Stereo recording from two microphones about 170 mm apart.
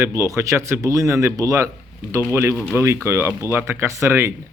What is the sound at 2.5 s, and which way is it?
Speech, 10° left (ahead or behind).